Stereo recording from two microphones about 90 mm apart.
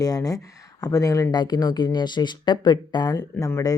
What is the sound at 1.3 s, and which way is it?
Speech, 50° left (ahead or behind).